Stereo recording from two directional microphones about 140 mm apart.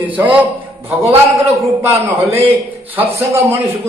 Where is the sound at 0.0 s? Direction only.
10° right (ahead or behind).